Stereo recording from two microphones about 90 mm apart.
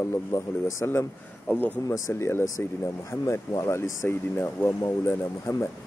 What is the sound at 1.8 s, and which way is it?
Speech, 35° left (ahead or behind).